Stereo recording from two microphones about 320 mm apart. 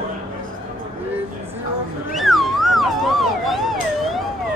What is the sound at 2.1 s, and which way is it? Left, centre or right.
Cat, centre.